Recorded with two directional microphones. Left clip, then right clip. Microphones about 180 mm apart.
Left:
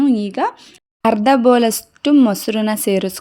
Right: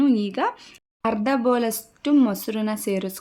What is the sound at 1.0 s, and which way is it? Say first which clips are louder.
Speech: left 9 dB; 45° left (ahead or behind).